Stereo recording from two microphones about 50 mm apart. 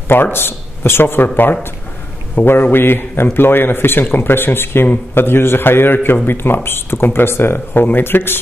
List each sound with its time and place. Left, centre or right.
0.1 s speech: left